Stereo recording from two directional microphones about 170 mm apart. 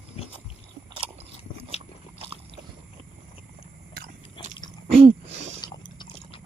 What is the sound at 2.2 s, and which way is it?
Biting, 35° right (ahead or behind).